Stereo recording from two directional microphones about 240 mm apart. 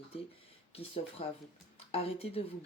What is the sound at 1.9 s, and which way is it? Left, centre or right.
Speech, left.